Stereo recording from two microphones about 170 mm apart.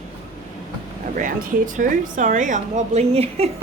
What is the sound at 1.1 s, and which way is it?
Speech, 50° right (ahead or behind).